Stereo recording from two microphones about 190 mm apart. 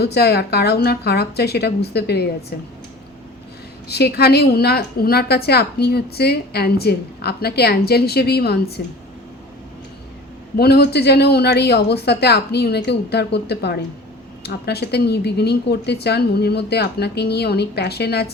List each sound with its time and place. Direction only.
0.0 s a woman's voice: 60° left (ahead or behind)
3.8 s a woman's voice: 60° left (ahead or behind)
10.6 s a woman's voice: 60° left (ahead or behind)